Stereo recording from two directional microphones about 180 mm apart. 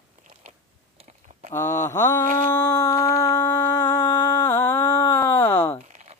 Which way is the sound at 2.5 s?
10° left (ahead or behind).